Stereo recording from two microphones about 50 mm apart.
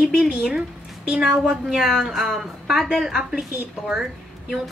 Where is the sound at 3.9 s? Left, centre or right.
Centre.